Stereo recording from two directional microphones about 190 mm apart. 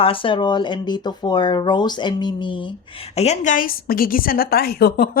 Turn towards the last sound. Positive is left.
turn(degrees=55)  # may be behind; listen again after turning